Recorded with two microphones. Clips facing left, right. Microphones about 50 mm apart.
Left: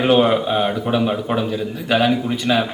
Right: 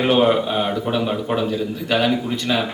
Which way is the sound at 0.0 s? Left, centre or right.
Centre.